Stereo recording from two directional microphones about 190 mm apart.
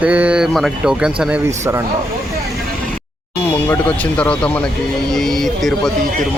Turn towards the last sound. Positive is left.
turn(degrees=0)  # may be behind; listen again after turning